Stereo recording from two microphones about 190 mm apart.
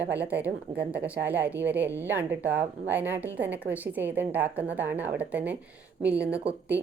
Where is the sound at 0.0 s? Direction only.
10° right (ahead or behind).